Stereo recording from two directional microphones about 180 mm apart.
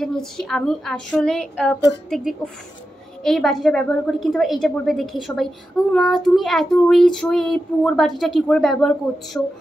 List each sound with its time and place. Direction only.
0.0 s a woman's voice: centre (ahead or behind)